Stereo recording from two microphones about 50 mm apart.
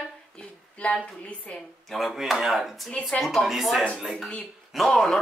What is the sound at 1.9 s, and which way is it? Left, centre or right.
Speech, centre.